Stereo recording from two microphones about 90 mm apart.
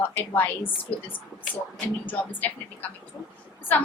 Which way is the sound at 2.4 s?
20° left (ahead or behind).